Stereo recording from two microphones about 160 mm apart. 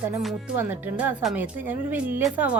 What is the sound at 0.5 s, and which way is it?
Speech, 10° right (ahead or behind).